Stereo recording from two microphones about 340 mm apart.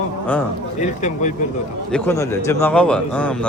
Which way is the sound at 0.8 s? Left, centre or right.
Left.